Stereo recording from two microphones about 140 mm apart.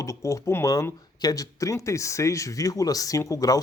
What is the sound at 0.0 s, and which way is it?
Speech, 20° left (ahead or behind).